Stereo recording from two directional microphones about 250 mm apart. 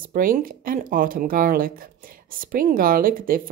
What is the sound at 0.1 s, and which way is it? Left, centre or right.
A woman's voice, right.